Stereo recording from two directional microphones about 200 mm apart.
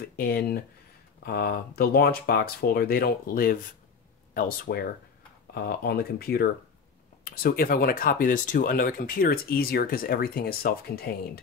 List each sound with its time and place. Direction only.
0.0 s speech: 50° left (ahead or behind)